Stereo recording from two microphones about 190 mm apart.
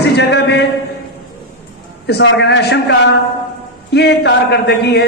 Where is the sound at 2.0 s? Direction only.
65° left (ahead or behind).